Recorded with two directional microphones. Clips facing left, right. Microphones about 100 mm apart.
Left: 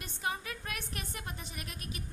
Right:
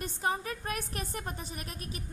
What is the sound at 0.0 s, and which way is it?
A woman's voice, 40° right (ahead or behind).